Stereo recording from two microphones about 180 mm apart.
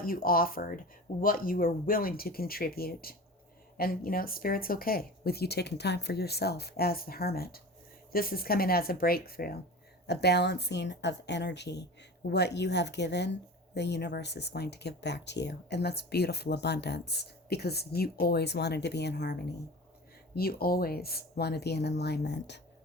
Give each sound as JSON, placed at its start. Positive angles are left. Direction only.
{"t": 0.0, "sound": "speech", "side_deg": 55}
{"t": 10.1, "sound": "a woman's voice", "side_deg": 70}
{"t": 20.3, "sound": "speech", "side_deg": 60}